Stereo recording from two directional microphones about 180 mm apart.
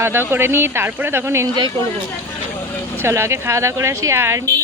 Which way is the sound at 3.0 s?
15° right (ahead or behind).